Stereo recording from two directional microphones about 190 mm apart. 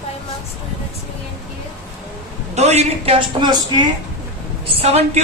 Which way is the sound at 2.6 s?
35° right (ahead or behind).